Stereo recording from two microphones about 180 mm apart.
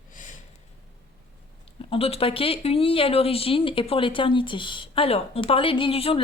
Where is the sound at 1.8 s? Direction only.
30° left (ahead or behind).